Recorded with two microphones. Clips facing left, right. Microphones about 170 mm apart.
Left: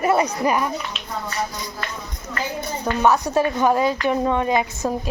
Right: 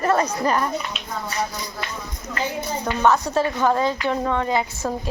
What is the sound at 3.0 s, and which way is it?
Speech, 15° left (ahead or behind).